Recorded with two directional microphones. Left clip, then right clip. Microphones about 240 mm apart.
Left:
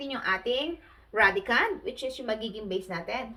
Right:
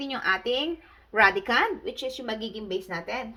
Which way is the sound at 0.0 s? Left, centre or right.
Right.